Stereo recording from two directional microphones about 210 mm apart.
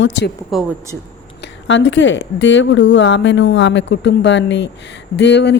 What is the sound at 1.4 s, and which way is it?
Speech, 60° left (ahead or behind).